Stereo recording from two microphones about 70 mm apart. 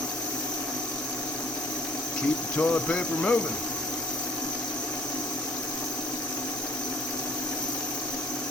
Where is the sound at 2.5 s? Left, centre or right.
Centre.